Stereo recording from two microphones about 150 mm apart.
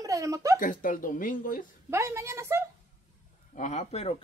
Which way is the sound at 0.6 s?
65° left (ahead or behind).